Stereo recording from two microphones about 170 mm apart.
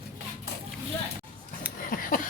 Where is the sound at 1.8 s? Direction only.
55° left (ahead or behind).